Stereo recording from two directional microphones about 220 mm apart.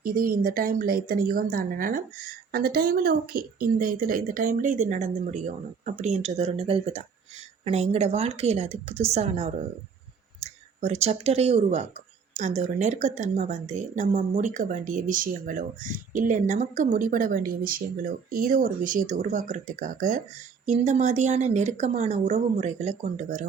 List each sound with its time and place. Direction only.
0.0 s a woman's voice: 40° right (ahead or behind)